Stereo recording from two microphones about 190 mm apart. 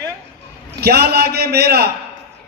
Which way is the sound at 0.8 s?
55° right (ahead or behind).